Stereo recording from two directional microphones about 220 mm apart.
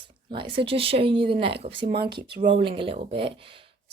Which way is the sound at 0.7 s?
25° right (ahead or behind).